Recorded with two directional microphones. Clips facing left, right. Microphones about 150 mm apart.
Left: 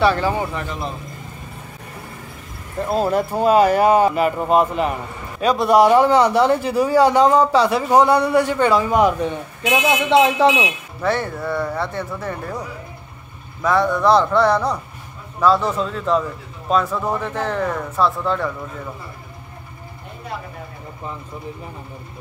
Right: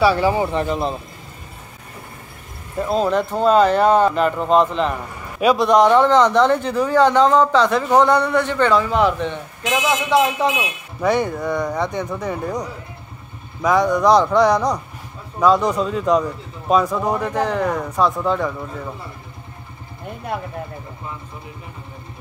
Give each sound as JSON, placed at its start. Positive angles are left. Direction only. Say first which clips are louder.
{"t": 0.0, "sound": "speech", "louder": "right 2 dB", "side_deg": -10}
{"t": 2.9, "sound": "a man's voice", "louder": "even", "side_deg": 10}
{"t": 9.7, "sound": "speech", "louder": "left 2 dB", "side_deg": 25}
{"t": 10.2, "sound": "speech", "louder": "left 4 dB", "side_deg": 90}
{"t": 11.0, "sound": "speech", "louder": "right 3 dB", "side_deg": -15}